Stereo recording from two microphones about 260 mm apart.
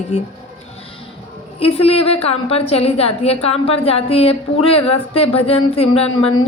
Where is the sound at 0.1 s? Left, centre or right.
Left.